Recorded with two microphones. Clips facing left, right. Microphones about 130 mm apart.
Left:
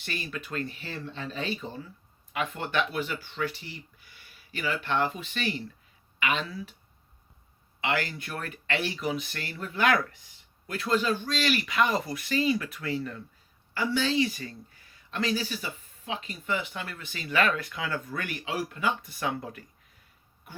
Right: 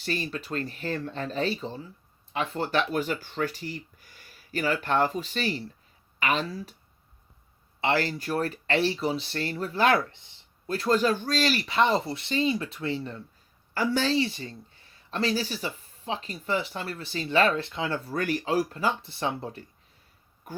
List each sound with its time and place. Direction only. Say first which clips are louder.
0.0 s speech: right 5 dB; 35° right (ahead or behind)
7.8 s speech: right 4 dB; 35° right (ahead or behind)
13.7 s speech: right 2 dB; 40° right (ahead or behind)
20.5 s speech: right 8 dB; 40° right (ahead or behind)